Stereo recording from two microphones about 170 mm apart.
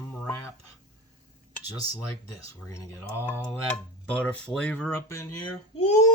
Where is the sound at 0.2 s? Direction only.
15° left (ahead or behind).